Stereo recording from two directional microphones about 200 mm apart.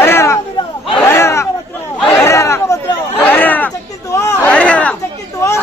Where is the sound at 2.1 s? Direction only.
15° left (ahead or behind).